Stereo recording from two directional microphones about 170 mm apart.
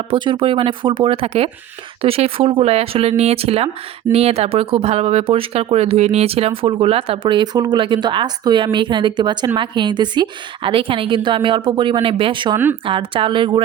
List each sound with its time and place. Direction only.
0.1 s a woman's voice: 30° right (ahead or behind)